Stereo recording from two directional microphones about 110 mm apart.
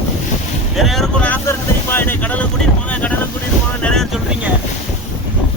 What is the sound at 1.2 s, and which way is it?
Boat, 20° left (ahead or behind).